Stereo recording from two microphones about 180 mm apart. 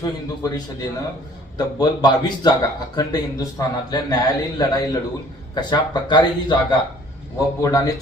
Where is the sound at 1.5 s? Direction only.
25° left (ahead or behind).